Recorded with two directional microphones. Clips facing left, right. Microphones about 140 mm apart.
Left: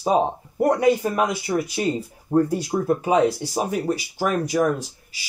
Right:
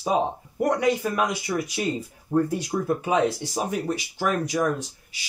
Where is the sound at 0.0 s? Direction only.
30° left (ahead or behind).